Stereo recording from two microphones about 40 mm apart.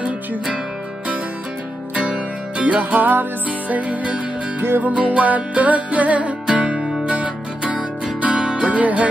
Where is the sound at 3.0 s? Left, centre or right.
Right.